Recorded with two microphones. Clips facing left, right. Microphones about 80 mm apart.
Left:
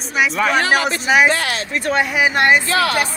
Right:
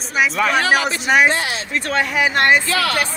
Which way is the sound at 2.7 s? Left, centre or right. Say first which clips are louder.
Left 2 dB; left.